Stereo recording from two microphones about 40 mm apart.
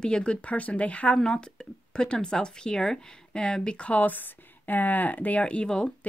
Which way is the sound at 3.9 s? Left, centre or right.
Left.